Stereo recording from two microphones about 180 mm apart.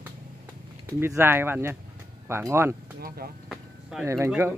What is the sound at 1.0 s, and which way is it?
Speech, 15° right (ahead or behind).